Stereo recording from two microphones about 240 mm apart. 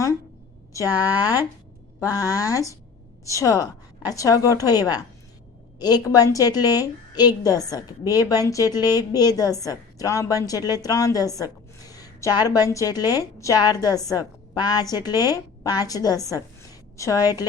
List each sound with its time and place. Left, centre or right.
2.0 s a woman's voice: centre